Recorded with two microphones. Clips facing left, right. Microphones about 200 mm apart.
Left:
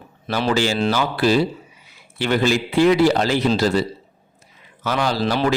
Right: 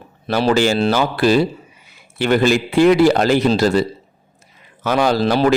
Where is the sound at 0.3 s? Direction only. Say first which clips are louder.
Right 5 dB; 45° right (ahead or behind).